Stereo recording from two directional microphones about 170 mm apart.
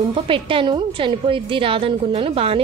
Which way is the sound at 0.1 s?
30° right (ahead or behind).